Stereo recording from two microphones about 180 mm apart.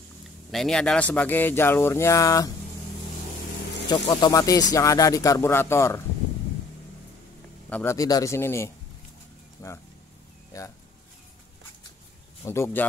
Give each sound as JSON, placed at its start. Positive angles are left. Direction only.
{"t": 0.5, "sound": "speech", "side_deg": 5}
{"t": 3.9, "sound": "speech", "side_deg": 25}
{"t": 7.7, "sound": "speech", "side_deg": 15}
{"t": 12.4, "sound": "speech", "side_deg": 15}